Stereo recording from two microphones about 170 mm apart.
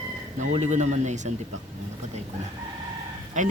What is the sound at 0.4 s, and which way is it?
Speech, 45° right (ahead or behind).